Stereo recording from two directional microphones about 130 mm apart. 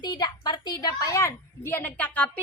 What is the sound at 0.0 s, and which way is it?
A woman's voice, 35° left (ahead or behind).